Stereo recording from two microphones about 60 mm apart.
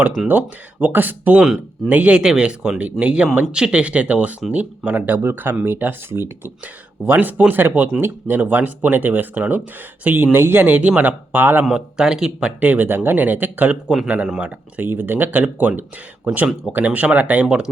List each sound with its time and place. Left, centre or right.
0.3 s speech: right
1.5 s speech: centre
1.9 s speech: right
2.1 s speech: centre
10.3 s speech: right
11.7 s speech: centre
12.5 s speech: right
13.8 s speech: centre
14.3 s speech: right
14.8 s speech: right; by 17.7 s centre